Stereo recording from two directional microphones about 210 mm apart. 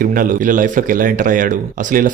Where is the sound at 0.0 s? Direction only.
40° right (ahead or behind).